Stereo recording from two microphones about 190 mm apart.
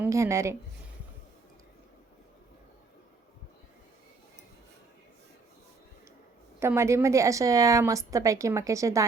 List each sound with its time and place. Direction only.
0.0 s a woman's voice: 15° right (ahead or behind)
6.6 s a woman's voice: 15° right (ahead or behind)